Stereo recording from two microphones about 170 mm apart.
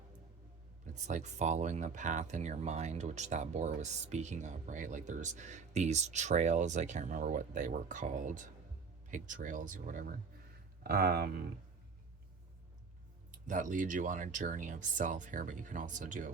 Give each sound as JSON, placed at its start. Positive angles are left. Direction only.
{"t": 1.0, "sound": "speech", "side_deg": -45}
{"t": 13.5, "sound": "speech", "side_deg": -50}